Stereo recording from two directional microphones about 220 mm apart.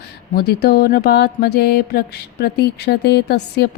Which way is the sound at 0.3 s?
45° left (ahead or behind).